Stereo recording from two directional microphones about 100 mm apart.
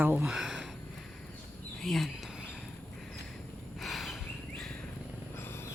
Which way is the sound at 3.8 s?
Centre (ahead or behind).